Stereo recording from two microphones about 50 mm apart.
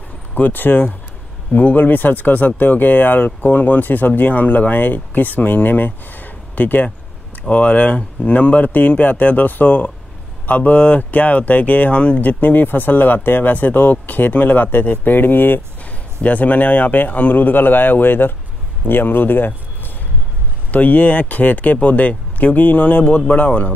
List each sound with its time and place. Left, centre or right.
0.3 s speech: left
16.2 s speech: left
20.7 s speech: left